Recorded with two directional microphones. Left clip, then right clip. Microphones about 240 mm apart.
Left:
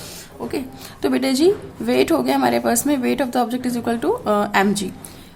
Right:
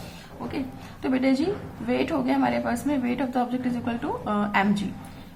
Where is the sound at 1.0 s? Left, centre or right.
Left.